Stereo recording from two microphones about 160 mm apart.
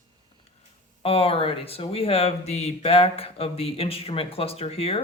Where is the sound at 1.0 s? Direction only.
35° left (ahead or behind).